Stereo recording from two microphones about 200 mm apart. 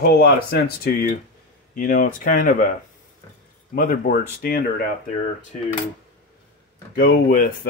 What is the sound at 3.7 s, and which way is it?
Speech, 45° left (ahead or behind).